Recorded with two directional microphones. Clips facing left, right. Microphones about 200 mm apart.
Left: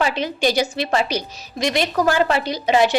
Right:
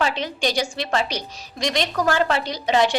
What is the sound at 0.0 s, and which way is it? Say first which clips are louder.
A woman's voice: left 3 dB; 10° left (ahead or behind).